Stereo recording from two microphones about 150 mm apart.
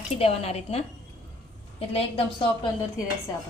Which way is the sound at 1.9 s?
35° left (ahead or behind).